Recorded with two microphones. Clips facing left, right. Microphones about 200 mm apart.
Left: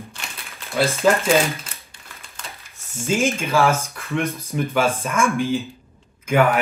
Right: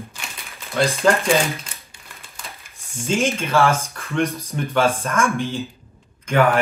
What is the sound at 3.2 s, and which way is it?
Speech, centre (ahead or behind).